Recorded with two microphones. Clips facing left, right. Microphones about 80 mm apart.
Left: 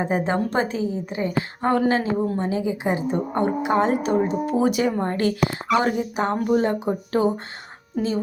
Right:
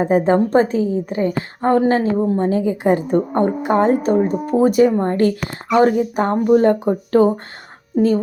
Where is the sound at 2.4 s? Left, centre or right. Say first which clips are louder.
Right 6 dB; right.